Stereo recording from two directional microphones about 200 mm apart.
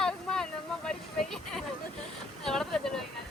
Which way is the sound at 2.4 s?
Centre (ahead or behind).